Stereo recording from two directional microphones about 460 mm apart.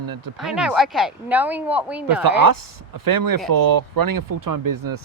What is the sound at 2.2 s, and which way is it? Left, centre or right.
Speech, right.